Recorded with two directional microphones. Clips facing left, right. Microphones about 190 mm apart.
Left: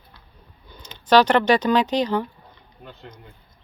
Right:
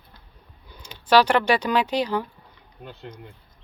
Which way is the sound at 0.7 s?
10° right (ahead or behind).